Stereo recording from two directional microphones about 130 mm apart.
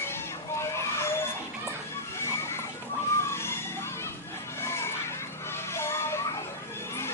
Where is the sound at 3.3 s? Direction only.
20° left (ahead or behind).